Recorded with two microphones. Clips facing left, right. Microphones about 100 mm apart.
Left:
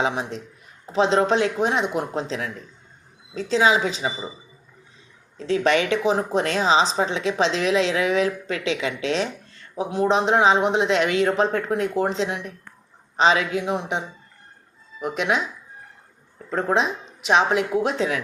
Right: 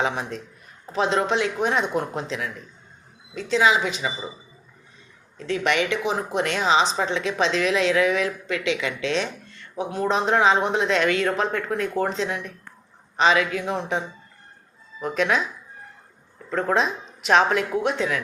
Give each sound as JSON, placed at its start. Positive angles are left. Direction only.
{"t": 0.0, "sound": "a woman's voice", "side_deg": 20}
{"t": 5.4, "sound": "a woman's voice", "side_deg": 30}
{"t": 15.0, "sound": "speech", "side_deg": 20}
{"t": 16.5, "sound": "speech", "side_deg": 30}